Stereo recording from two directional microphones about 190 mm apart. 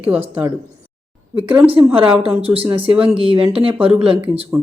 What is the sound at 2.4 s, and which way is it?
Speech, 30° right (ahead or behind).